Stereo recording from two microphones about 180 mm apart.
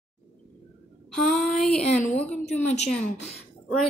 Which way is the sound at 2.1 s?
5° left (ahead or behind).